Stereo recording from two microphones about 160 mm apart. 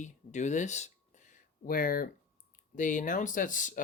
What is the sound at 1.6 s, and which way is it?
Speech, 65° left (ahead or behind).